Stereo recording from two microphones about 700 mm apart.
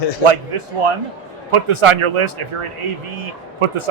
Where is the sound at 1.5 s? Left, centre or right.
Right.